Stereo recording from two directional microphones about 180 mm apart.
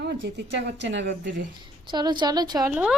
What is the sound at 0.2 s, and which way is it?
Speech, 80° right.